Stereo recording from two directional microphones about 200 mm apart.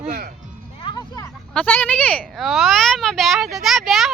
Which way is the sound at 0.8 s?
20° left (ahead or behind).